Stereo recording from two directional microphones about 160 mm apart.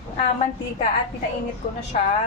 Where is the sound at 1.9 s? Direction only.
50° left (ahead or behind).